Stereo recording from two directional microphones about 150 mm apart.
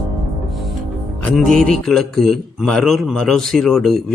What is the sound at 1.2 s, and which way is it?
A man's voice, 5° left (ahead or behind).